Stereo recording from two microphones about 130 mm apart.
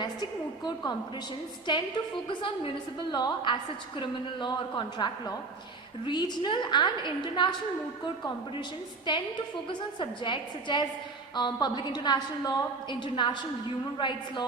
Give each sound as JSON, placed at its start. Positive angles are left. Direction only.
{"t": 0.6, "sound": "a woman's voice", "side_deg": 30}
{"t": 9.1, "sound": "a woman's voice", "side_deg": 35}